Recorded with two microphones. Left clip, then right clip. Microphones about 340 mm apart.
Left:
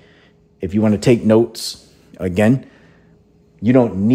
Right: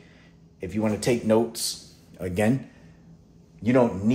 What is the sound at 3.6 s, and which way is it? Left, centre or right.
Speech, left.